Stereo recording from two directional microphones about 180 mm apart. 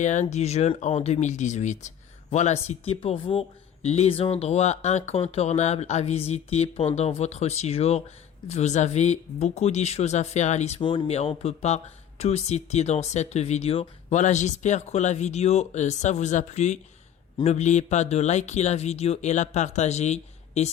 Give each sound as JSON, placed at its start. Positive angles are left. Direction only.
{"t": 0.0, "sound": "speech", "side_deg": 40}
{"t": 10.8, "sound": "speech", "side_deg": 25}